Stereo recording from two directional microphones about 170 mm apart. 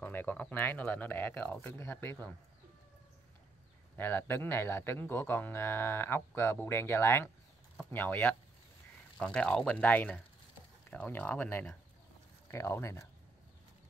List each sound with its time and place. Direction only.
0.0 s speech: 10° left (ahead or behind)
3.9 s speech: 10° left (ahead or behind)